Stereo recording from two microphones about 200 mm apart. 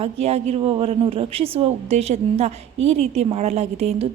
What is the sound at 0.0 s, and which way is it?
A woman's voice, 30° right (ahead or behind).